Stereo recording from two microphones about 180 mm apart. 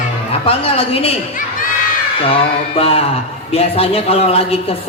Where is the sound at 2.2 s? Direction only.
30° left (ahead or behind).